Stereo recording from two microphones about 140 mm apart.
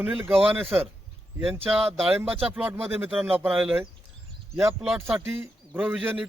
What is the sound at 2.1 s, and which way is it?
Speech, 10° right (ahead or behind).